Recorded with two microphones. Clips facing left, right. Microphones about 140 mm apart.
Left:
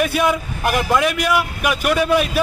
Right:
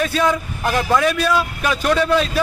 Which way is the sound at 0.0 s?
15° left (ahead or behind).